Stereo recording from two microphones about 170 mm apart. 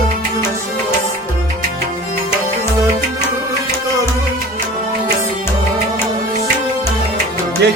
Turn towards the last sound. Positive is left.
turn(degrees=-75)  # may be behind; listen again after turning